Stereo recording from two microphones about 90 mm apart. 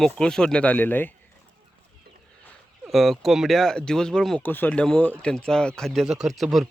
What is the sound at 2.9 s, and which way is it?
Speech, centre (ahead or behind).